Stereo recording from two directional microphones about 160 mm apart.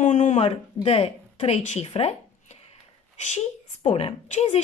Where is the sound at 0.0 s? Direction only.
50° left (ahead or behind).